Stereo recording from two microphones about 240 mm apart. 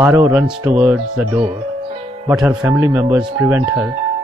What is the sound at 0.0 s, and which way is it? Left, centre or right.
Speech, centre.